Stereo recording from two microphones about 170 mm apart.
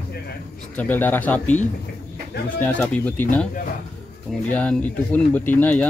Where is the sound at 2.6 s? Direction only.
10° left (ahead or behind).